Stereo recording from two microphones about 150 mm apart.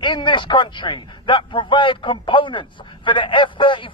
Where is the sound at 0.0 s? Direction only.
30° left (ahead or behind).